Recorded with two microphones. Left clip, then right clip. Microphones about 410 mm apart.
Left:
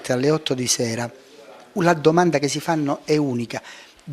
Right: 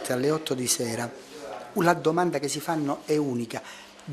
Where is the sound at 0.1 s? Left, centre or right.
Left.